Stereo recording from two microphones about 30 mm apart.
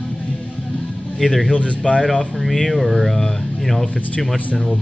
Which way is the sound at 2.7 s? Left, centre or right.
Centre.